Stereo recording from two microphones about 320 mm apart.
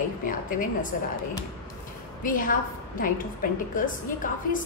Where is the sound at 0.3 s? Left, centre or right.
Left.